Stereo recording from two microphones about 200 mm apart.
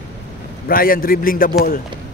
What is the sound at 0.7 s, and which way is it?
Speech, 45° left (ahead or behind).